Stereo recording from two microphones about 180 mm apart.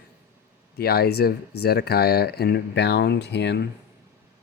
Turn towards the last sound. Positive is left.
turn(degrees=70)  # may be behind; listen again after turning